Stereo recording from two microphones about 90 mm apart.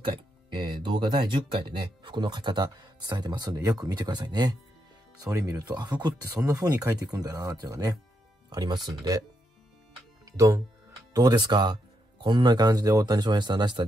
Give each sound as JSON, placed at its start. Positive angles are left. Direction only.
{"t": 0.8, "sound": "speech", "side_deg": -60}
{"t": 5.2, "sound": "speech", "side_deg": -35}
{"t": 6.2, "sound": "speech", "side_deg": -35}
{"t": 10.2, "sound": "speech", "side_deg": -40}